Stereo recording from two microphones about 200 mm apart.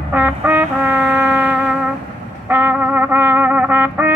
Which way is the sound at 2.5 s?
10° right (ahead or behind).